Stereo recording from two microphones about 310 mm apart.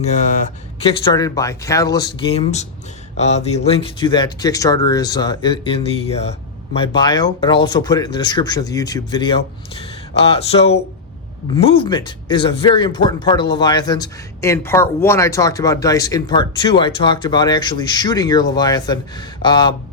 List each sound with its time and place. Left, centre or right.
0.8 s speech: centre